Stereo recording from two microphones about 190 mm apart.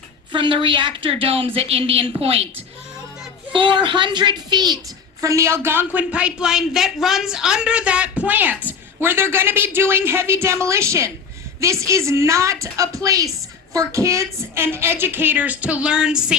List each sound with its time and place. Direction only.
0.3 s a woman's voice: 25° right (ahead or behind)
3.5 s a woman's voice: 25° right (ahead or behind); by 16.1 s 5° right (ahead or behind)